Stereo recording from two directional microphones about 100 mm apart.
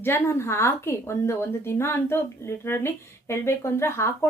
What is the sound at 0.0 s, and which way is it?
A woman's voice, 25° left (ahead or behind).